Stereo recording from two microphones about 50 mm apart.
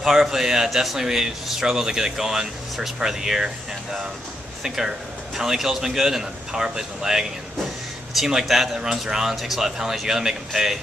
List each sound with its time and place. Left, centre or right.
0.0 s speech: centre